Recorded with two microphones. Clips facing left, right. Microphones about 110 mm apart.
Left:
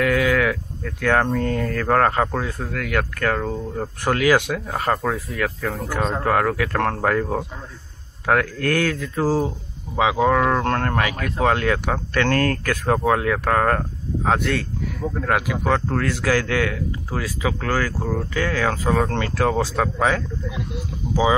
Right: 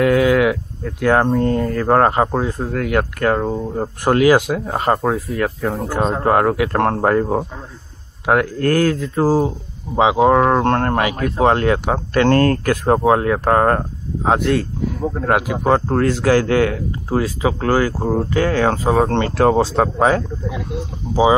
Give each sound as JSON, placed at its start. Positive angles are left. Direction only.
{"t": 0.0, "sound": "speech", "side_deg": -25}
{"t": 8.5, "sound": "speech", "side_deg": -35}